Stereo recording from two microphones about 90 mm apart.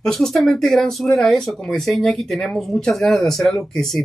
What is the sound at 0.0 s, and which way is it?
Speech, 5° left (ahead or behind).